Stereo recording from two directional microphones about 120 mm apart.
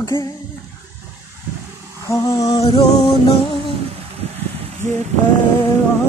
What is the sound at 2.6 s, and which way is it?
Music, 45° left (ahead or behind).